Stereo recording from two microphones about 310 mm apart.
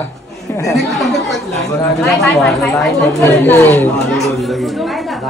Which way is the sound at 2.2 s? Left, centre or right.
Centre.